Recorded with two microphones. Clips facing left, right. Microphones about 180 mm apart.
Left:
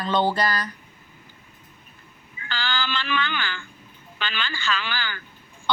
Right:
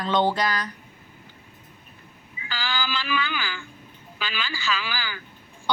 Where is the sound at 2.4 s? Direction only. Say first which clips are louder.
Left 1 dB; 5° right (ahead or behind).